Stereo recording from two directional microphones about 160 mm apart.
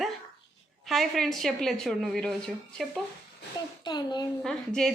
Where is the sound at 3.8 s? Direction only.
25° left (ahead or behind).